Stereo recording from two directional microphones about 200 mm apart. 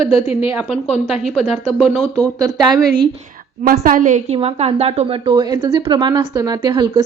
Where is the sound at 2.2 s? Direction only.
20° right (ahead or behind).